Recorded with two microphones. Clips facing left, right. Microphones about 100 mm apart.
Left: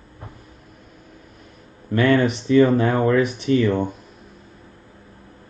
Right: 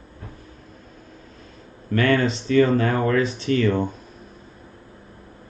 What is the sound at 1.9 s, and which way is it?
Speech, 20° left (ahead or behind).